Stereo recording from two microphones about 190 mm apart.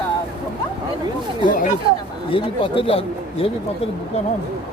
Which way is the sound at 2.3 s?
25° left (ahead or behind).